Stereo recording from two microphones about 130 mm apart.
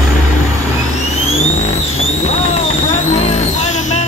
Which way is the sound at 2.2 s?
55° left (ahead or behind).